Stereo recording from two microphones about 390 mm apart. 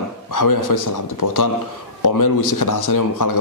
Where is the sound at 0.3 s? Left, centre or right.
Left.